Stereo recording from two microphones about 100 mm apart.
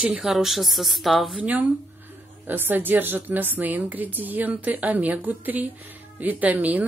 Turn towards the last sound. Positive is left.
turn(degrees=-15)  # may be behind; listen again after turning